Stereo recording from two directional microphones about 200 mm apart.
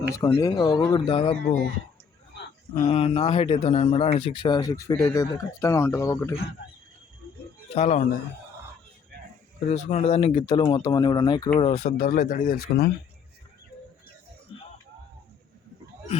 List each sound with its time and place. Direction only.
0.1 s speech: 15° left (ahead or behind)
2.8 s speech: 30° left (ahead or behind)
7.7 s a man's voice: 35° left (ahead or behind)
9.6 s speech: 35° left (ahead or behind)
11.6 s speech: 35° left (ahead or behind); by 12.9 s 50° left (ahead or behind)